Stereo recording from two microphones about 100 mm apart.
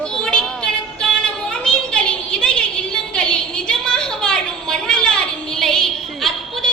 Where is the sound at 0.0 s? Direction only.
10° left (ahead or behind).